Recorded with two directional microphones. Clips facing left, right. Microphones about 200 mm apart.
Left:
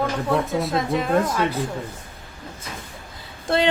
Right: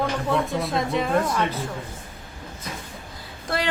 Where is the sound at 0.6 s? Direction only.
Centre (ahead or behind).